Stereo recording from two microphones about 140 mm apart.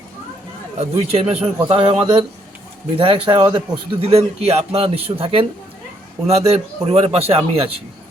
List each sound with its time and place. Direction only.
0.8 s a man's voice: 45° right (ahead or behind)